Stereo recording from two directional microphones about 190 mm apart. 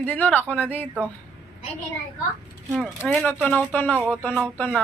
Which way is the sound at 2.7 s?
Centre (ahead or behind).